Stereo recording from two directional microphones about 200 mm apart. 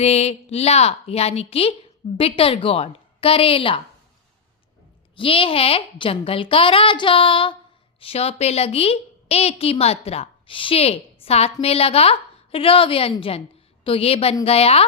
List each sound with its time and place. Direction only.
0.0 s a woman's voice: 30° left (ahead or behind)
5.1 s a woman's voice: 25° left (ahead or behind)